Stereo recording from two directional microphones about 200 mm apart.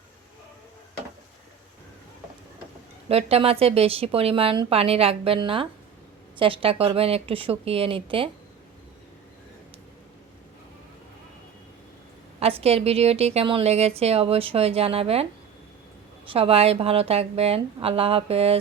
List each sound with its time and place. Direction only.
3.1 s a woman's voice: 30° right (ahead or behind)
12.4 s a woman's voice: 30° right (ahead or behind)